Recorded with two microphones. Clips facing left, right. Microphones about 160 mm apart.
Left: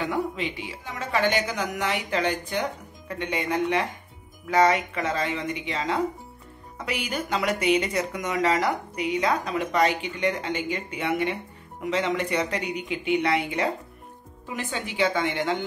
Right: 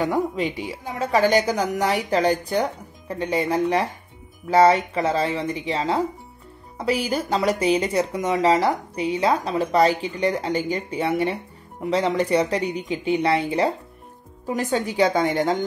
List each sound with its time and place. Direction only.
0.0 s speech: 40° right (ahead or behind)